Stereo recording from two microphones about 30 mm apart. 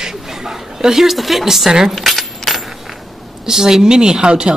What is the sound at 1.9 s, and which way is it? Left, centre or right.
Keys jangling, centre.